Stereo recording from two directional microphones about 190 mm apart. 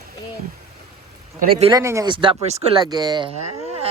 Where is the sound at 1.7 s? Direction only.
15° right (ahead or behind).